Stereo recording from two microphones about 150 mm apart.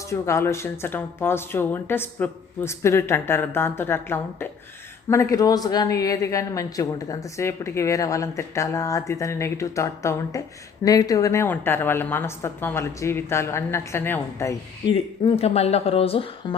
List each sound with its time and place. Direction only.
0.1 s speech: 20° left (ahead or behind)
14.9 s speech: 40° left (ahead or behind)